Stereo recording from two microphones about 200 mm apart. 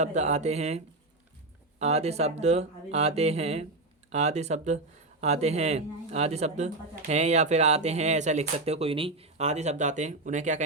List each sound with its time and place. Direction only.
0.0 s speech: 35° right (ahead or behind)
1.8 s speech: 30° right (ahead or behind)